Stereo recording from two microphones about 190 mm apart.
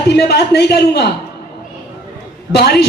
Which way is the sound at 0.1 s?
60° left (ahead or behind).